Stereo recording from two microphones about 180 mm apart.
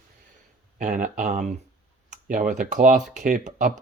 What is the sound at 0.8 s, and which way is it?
Speech, 45° right (ahead or behind).